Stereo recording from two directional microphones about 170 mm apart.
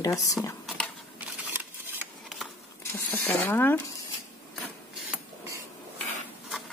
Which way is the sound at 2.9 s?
10° left (ahead or behind).